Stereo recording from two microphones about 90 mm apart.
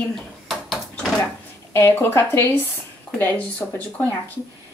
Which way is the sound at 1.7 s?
25° left (ahead or behind).